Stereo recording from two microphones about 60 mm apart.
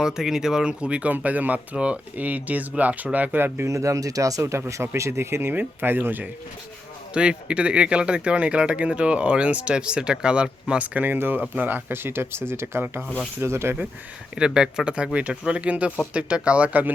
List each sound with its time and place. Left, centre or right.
0.0 s speech: centre; by 3.4 s right
3.7 s speech: right
4.9 s speech: right
7.1 s speech: centre; by 12.8 s right
12.8 s speech: right
13.4 s speech: right
14.3 s speech: centre